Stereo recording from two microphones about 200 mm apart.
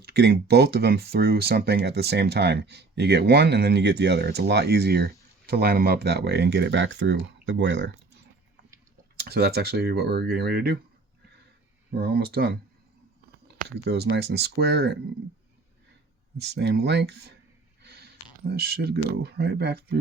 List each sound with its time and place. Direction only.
0.0 s speech: 55° right (ahead or behind)
11.9 s speech: 50° right (ahead or behind)
13.6 s speech: 55° right (ahead or behind)
16.4 s speech: 55° right (ahead or behind)
17.8 s a sound: 50° right (ahead or behind)
19.1 s speech: 55° right (ahead or behind)